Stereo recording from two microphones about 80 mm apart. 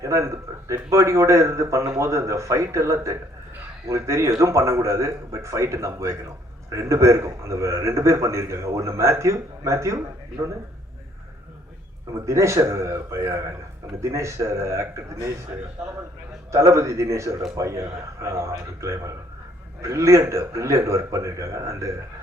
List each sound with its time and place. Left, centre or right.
0.0 s a man's voice: right
12.2 s a man's voice: right
16.5 s a man's voice: right